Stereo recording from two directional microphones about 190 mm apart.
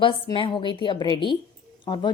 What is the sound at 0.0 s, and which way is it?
A woman's voice, 25° left (ahead or behind).